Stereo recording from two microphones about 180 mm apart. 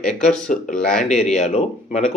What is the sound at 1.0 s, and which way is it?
Speech, 40° left (ahead or behind).